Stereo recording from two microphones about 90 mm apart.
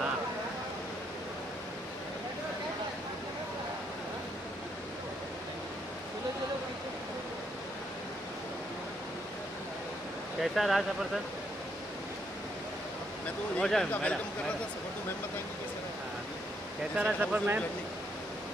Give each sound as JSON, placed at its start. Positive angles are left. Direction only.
{"t": 10.4, "sound": "speech", "side_deg": 0}
{"t": 13.6, "sound": "speech", "side_deg": 5}
{"t": 16.9, "sound": "speech", "side_deg": -15}